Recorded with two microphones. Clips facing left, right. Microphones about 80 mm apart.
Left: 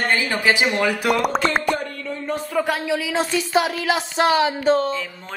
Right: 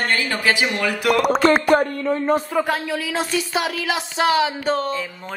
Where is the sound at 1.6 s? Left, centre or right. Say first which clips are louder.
Right 7 dB; right.